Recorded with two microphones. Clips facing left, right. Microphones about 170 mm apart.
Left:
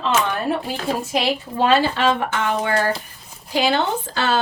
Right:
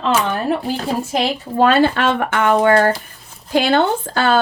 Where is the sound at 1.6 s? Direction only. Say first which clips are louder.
Right 4 dB; 55° right (ahead or behind).